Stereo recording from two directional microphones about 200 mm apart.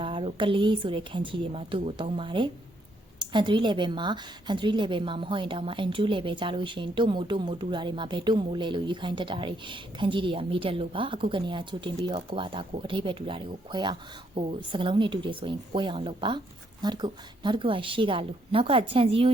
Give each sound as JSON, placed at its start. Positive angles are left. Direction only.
{"t": 0.0, "sound": "a woman's voice", "side_deg": -25}